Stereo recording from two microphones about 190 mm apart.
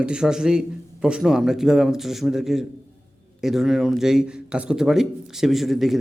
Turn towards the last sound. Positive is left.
turn(degrees=0)  # may be behind; listen again after turning